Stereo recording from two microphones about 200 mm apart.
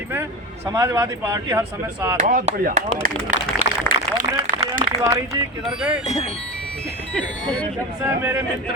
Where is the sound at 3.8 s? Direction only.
45° right (ahead or behind).